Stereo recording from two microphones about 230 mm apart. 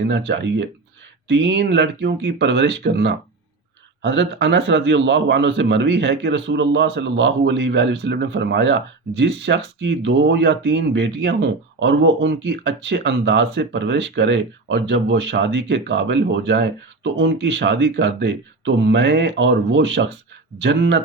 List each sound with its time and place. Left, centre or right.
0.1 s a man's voice: right